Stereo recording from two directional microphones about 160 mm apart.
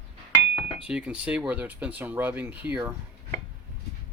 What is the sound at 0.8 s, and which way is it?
Speech, 10° right (ahead or behind).